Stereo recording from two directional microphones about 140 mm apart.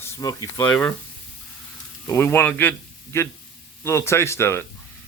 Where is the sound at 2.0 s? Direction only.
15° left (ahead or behind).